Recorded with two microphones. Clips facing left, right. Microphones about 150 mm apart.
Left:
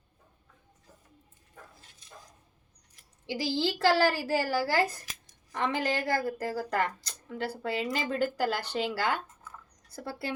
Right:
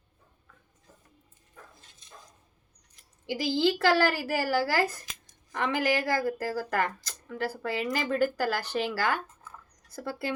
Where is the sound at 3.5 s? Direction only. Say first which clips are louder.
Right 2 dB; 25° left (ahead or behind).